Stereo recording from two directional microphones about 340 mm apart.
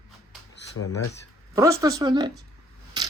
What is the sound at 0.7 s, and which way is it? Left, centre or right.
Speech, left.